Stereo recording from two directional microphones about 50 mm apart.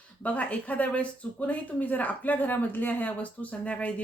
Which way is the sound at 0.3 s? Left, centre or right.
Left.